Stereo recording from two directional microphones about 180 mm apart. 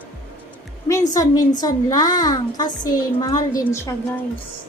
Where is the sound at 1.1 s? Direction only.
20° left (ahead or behind).